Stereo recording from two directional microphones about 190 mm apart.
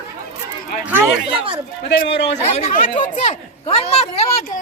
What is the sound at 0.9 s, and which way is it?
Speech, 10° right (ahead or behind).